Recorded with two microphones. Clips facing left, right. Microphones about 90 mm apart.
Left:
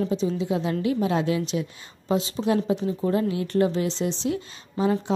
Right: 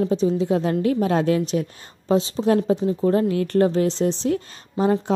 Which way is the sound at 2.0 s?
35° right (ahead or behind).